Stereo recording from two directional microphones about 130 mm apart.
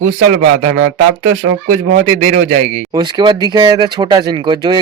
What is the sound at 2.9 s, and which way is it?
Speech, 35° right (ahead or behind).